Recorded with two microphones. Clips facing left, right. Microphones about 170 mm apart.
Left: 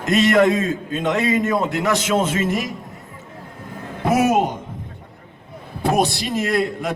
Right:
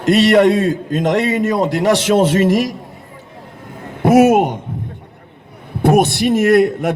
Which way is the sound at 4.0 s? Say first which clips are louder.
Right 7 dB; 70° right (ahead or behind).